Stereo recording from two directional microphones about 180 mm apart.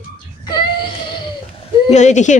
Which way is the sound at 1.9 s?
40° left (ahead or behind).